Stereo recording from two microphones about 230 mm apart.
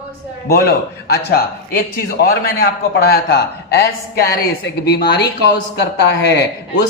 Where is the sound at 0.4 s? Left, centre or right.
Left.